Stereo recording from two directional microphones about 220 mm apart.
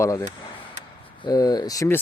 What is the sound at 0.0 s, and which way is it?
Speech, 10° left (ahead or behind).